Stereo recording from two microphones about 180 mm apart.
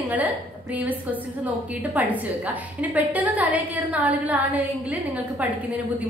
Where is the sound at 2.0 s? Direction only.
10° right (ahead or behind).